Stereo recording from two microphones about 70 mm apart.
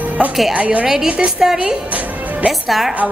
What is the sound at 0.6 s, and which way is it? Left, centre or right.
Music, right.